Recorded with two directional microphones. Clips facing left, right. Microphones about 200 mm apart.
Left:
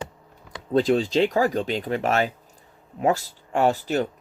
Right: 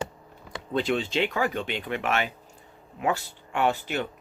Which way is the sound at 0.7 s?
40° left (ahead or behind).